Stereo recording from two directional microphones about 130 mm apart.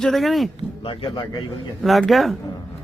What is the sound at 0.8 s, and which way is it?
Speech, 40° left (ahead or behind).